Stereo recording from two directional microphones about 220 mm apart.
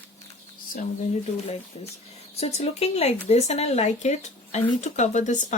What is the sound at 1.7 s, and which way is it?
Speech, 30° left (ahead or behind).